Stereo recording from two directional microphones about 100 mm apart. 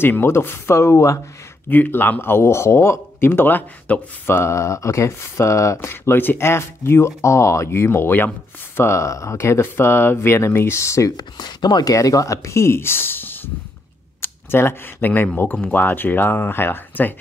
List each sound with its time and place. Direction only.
0.0 s speech: 20° left (ahead or behind)
1.7 s speech: 20° left (ahead or behind)
4.3 s speech: 25° left (ahead or behind)